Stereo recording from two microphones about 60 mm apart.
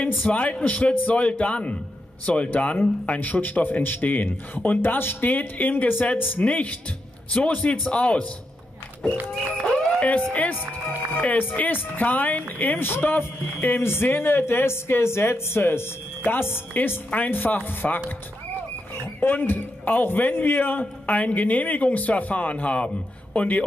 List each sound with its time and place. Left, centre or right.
0.0 s speech: left
9.9 s speech: left
19.1 s speech: left